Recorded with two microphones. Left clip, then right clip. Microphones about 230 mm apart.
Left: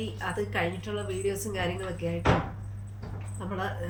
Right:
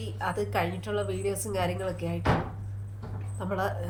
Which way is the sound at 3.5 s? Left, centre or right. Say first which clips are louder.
Right 4 dB; centre.